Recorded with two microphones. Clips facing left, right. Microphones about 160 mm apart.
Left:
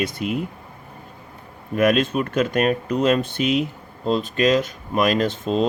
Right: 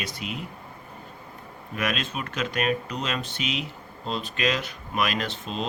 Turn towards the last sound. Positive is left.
turn(degrees=50)  # may be behind; listen again after turning